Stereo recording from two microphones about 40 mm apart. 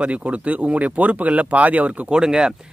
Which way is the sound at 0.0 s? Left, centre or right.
Right.